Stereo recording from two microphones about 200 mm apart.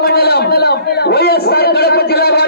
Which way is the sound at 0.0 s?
50° left (ahead or behind).